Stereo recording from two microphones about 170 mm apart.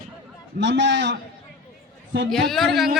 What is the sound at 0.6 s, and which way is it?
Speech, 90° right.